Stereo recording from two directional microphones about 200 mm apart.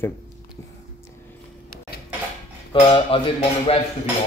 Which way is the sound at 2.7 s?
25° left (ahead or behind).